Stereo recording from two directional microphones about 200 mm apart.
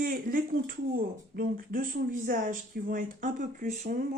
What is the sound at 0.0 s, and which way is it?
Speech, 45° right (ahead or behind).